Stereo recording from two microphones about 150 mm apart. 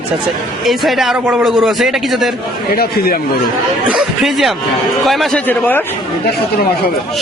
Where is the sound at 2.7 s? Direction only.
80° left.